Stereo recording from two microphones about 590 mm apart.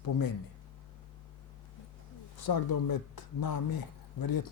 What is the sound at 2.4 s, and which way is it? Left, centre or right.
Speech, left.